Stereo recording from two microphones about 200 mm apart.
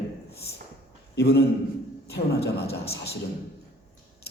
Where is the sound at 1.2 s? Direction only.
55° left (ahead or behind).